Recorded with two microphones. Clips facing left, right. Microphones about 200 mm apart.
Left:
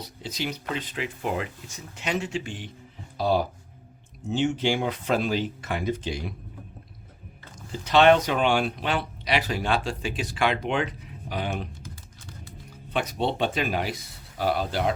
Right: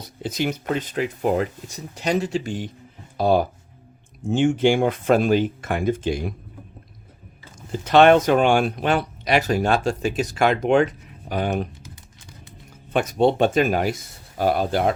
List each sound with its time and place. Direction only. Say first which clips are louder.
0.0 s a sound: right 7 dB; 50° right (ahead or behind)
0.7 s speech: right 7 dB; 45° right (ahead or behind)
3.2 s speech: right 5 dB; 50° right (ahead or behind)
7.7 s speech: right 4 dB; 50° right (ahead or behind)
12.9 s speech: right 8 dB; 45° right (ahead or behind)